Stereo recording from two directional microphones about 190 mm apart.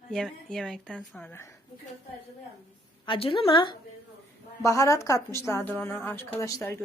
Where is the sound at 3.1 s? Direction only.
30° left (ahead or behind).